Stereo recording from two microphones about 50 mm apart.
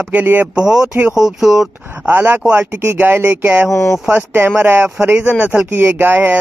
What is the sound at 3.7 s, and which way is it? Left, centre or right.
Speech, left.